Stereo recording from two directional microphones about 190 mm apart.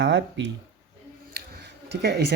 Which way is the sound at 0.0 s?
70° right (ahead or behind).